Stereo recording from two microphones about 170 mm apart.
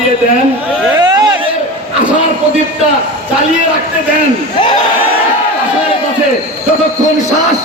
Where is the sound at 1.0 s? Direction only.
25° right (ahead or behind).